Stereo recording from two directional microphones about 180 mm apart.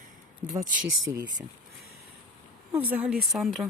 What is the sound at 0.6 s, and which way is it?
Speech, 45° right (ahead or behind).